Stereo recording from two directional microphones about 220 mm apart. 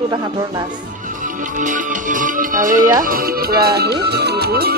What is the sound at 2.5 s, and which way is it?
Speech, 35° right (ahead or behind).